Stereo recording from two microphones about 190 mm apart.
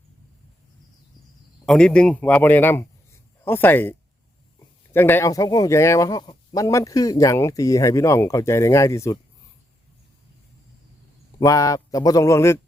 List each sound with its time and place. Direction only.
1.6 s speech: 5° left (ahead or behind)
11.3 s speech: 20° left (ahead or behind)